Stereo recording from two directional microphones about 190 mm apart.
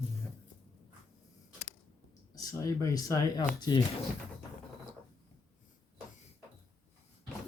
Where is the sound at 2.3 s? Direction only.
20° left (ahead or behind).